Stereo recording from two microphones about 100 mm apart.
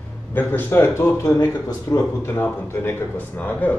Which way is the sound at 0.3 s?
20° left (ahead or behind).